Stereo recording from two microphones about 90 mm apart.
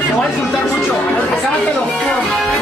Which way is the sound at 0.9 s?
10° left (ahead or behind).